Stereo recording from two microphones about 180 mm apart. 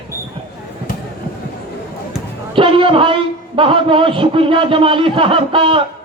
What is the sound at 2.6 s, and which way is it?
A man's voice, 30° right (ahead or behind).